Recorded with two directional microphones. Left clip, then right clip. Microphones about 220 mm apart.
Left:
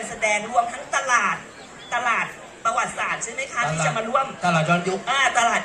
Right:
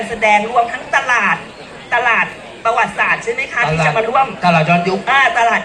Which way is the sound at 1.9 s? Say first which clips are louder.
Right 9 dB; 50° left (ahead or behind).